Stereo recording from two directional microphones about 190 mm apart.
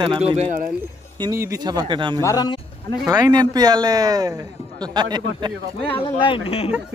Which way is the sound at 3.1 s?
20° right (ahead or behind).